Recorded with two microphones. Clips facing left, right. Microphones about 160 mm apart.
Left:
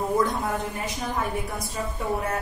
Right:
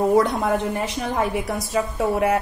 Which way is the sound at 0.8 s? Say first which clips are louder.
Right 5 dB; 80° right.